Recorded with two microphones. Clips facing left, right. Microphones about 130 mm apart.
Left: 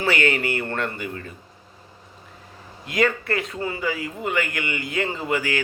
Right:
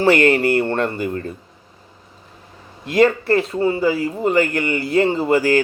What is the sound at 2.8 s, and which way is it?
Speech, 30° right (ahead or behind).